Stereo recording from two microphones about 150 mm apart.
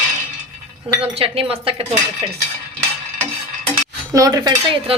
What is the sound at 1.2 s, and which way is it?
Speech, 40° right (ahead or behind).